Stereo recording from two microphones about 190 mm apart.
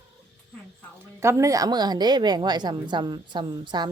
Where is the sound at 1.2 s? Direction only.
15° right (ahead or behind).